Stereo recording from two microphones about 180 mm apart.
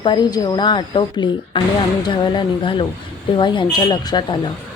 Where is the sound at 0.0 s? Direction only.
25° left (ahead or behind).